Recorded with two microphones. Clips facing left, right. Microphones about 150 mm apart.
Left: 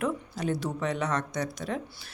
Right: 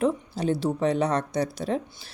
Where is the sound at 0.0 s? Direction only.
30° right (ahead or behind).